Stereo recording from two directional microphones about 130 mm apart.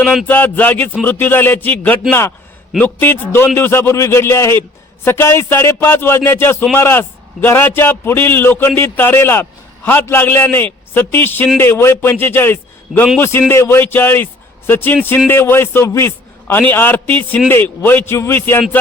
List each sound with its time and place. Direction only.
0.0 s speech: centre (ahead or behind)
0.3 s a man's voice: 15° left (ahead or behind)